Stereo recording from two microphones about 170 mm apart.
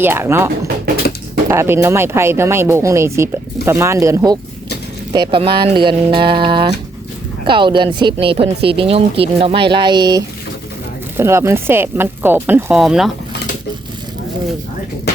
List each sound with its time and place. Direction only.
0.0 s speech: 15° right (ahead or behind)